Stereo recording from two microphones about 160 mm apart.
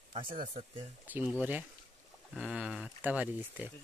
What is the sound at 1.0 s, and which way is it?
Speech, 10° right (ahead or behind).